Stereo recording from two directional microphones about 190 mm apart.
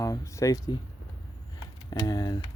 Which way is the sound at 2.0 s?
20° left (ahead or behind).